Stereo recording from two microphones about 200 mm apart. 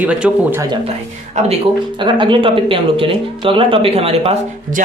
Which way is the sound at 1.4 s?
35° right (ahead or behind).